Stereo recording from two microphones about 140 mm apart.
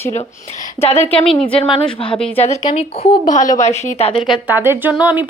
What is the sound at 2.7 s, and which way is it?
A woman's voice, 45° left (ahead or behind).